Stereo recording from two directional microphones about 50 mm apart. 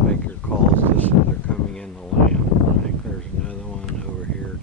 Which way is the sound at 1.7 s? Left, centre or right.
Centre.